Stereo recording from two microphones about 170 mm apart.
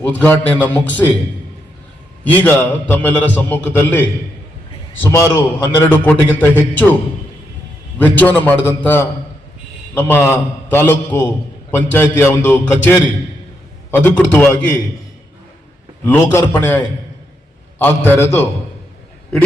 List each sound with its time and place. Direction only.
0.0 s a man's voice: 10° left (ahead or behind)
2.2 s a man's voice: 10° left (ahead or behind)
5.1 s a man's voice: 15° left (ahead or behind)
6.1 s a man's voice: 10° left (ahead or behind)
8.2 s a man's voice: 10° left (ahead or behind)
16.0 s a man's voice: 15° left (ahead or behind)